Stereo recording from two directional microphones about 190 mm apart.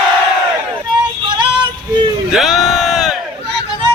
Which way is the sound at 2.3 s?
Centre (ahead or behind).